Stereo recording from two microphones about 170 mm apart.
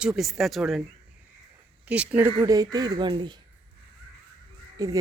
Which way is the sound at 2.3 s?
20° right (ahead or behind).